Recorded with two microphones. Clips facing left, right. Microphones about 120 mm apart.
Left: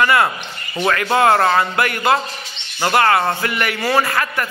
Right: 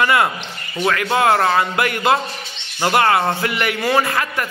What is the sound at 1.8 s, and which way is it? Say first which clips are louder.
Music: even; 20° right (ahead or behind).